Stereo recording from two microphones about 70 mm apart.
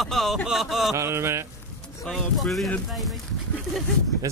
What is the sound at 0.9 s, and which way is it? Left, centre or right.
Speech, right.